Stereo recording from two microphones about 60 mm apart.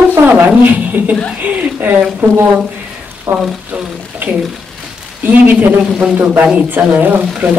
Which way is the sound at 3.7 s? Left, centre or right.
Right.